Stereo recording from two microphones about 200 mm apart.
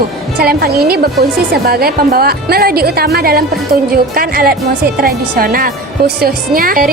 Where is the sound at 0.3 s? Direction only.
50° right (ahead or behind).